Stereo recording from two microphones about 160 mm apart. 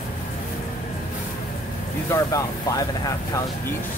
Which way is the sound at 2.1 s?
20° left (ahead or behind).